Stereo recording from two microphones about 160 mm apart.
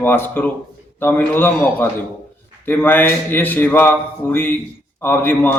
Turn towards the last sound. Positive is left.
turn(degrees=10)  # may be behind; listen again after turning